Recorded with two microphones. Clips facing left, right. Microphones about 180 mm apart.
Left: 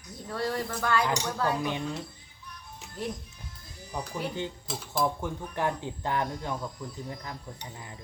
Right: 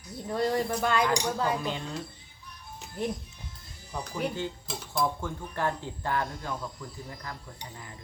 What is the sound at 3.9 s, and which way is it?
Speech, 15° left (ahead or behind).